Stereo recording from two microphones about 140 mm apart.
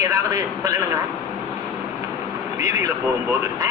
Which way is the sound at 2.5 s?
20° right (ahead or behind).